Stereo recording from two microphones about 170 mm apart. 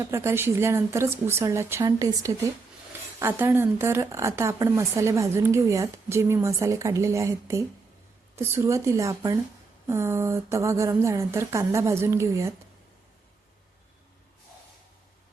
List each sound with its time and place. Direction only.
0.0 s a woman's voice: 15° right (ahead or behind)